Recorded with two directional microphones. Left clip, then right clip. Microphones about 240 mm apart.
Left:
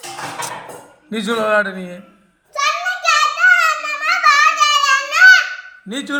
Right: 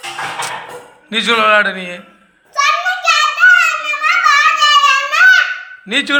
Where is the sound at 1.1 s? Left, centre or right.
Left.